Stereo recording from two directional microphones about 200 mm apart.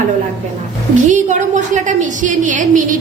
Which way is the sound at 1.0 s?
40° right (ahead or behind).